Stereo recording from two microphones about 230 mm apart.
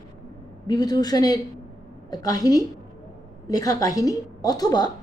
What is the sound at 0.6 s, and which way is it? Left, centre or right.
A woman's voice, centre.